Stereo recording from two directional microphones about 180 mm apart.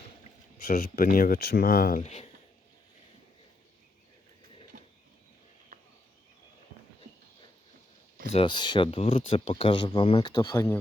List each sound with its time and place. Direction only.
0.7 s speech: 55° left (ahead or behind); by 2.3 s 40° left (ahead or behind)
4.7 s a sound: 50° right (ahead or behind)
8.3 s speech: 30° left (ahead or behind)